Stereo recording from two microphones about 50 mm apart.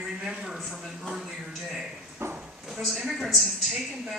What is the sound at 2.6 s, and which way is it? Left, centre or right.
Speech, centre.